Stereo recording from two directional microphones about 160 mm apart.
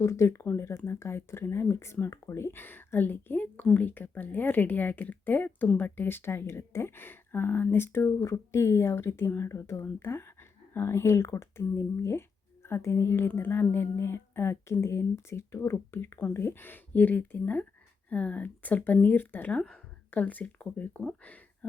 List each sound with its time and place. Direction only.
0.0 s speech: 20° left (ahead or behind)